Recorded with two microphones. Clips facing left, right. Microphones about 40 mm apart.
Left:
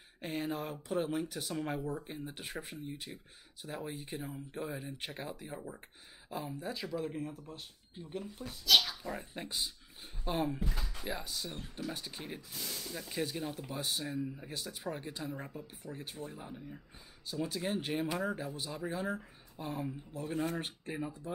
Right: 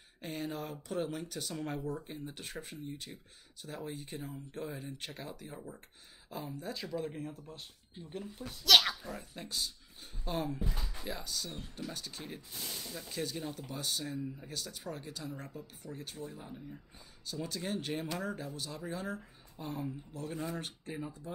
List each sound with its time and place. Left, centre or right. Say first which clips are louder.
0.2 s speech: left 2 dB; centre
8.6 s speech: right 3 dB; right
9.0 s speech: left 3 dB; left